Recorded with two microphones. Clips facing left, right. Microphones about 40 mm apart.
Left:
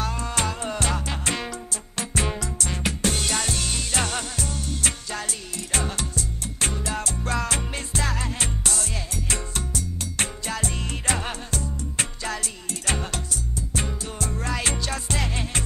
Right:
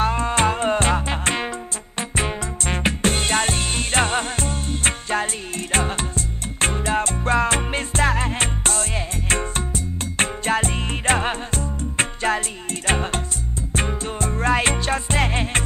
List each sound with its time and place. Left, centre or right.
0.0 s music: right